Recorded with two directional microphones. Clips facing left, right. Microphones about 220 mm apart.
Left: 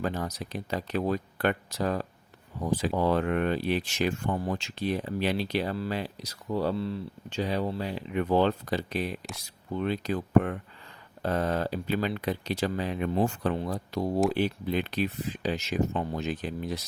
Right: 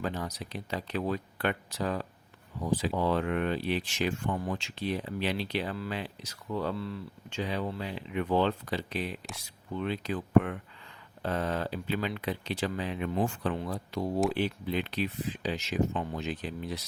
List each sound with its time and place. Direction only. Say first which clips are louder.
0.0 s speech: left 3 dB; 45° left (ahead or behind)